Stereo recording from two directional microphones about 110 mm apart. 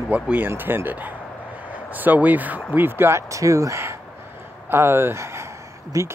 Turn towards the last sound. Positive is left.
turn(degrees=-30)  # may be behind; listen again after turning